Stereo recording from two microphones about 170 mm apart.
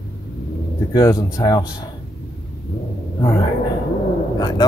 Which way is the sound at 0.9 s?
20° left (ahead or behind).